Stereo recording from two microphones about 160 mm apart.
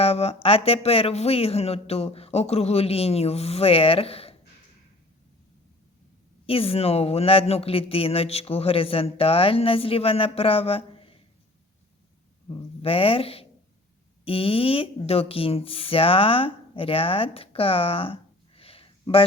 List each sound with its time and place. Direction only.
0.0 s speech: 40° left (ahead or behind)
6.4 s speech: 35° left (ahead or behind)
12.8 s speech: 35° left (ahead or behind)